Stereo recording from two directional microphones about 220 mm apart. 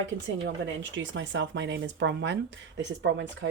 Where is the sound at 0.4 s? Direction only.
55° right (ahead or behind).